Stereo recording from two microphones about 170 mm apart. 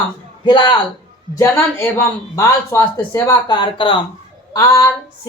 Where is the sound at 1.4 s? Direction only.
15° left (ahead or behind).